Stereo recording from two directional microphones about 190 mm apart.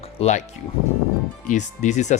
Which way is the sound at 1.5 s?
40° left (ahead or behind).